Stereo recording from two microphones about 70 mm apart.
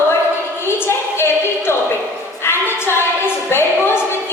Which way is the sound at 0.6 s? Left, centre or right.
Left.